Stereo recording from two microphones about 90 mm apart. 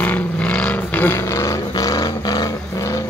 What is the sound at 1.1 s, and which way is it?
Vehicle, 30° left (ahead or behind).